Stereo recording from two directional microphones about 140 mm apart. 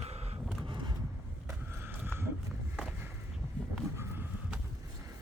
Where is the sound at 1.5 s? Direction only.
15° right (ahead or behind).